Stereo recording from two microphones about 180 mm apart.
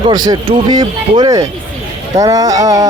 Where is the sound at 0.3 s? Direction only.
25° right (ahead or behind).